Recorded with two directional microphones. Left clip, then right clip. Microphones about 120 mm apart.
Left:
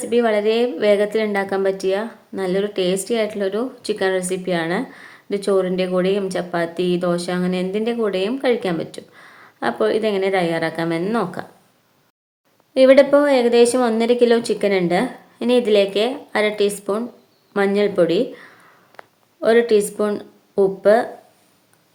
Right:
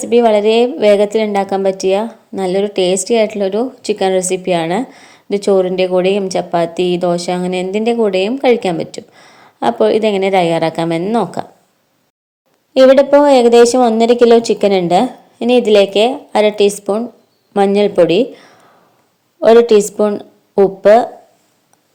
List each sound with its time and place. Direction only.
0.0 s a woman's voice: 35° right (ahead or behind)
12.7 s a woman's voice: 45° right (ahead or behind)
20.1 s a sound: 30° right (ahead or behind)